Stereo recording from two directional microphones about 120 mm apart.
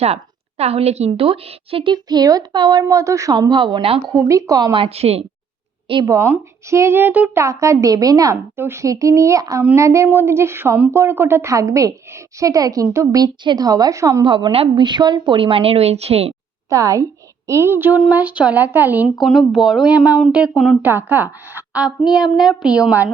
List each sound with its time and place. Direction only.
0.0 s a woman's voice: 60° right (ahead or behind)
4.1 s a woman's voice: 25° right (ahead or behind)
4.8 s a woman's voice: 55° right (ahead or behind)
6.1 s a woman's voice: 20° right (ahead or behind)
7.4 s a woman's voice: 25° right (ahead or behind)
14.3 s a woman's voice: 45° right (ahead or behind)
16.6 s a woman's voice: 30° right (ahead or behind)
19.1 s speech: centre (ahead or behind)
20.8 s a woman's voice: 15° right (ahead or behind)